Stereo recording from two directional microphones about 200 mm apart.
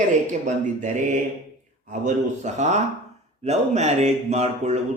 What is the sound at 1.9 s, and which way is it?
Speech, 35° right (ahead or behind).